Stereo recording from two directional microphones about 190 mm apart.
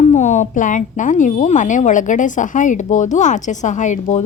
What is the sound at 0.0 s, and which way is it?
A woman's voice, 40° left (ahead or behind).